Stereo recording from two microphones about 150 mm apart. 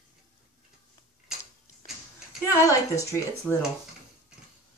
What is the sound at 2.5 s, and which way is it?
Speech, 20° left (ahead or behind).